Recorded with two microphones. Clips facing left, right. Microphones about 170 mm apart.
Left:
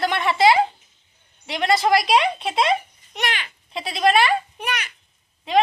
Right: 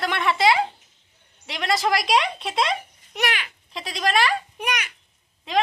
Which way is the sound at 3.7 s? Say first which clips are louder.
Left 5 dB; 5° left (ahead or behind).